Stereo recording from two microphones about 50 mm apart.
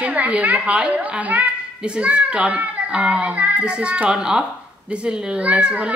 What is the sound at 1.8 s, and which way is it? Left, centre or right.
A child's voice, right.